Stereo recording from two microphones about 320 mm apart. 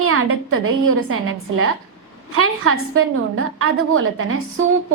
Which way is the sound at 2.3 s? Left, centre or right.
Right.